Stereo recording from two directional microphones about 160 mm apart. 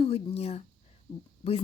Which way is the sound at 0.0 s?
40° left (ahead or behind).